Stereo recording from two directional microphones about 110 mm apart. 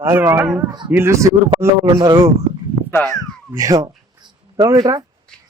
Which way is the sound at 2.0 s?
45° right (ahead or behind).